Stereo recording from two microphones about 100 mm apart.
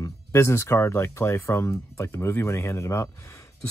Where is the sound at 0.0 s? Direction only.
30° left (ahead or behind).